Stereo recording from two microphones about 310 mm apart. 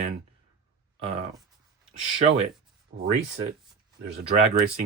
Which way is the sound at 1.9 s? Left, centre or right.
Centre.